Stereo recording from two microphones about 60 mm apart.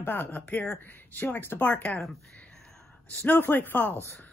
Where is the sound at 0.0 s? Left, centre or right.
Left.